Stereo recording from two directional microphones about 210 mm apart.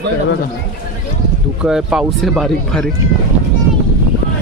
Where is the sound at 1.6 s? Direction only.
5° right (ahead or behind).